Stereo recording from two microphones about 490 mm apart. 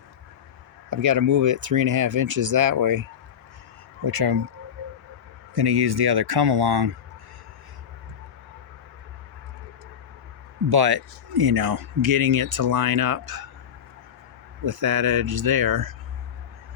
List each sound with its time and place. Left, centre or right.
0.9 s speech: right
5.5 s speech: right
10.7 s speech: right
14.6 s speech: right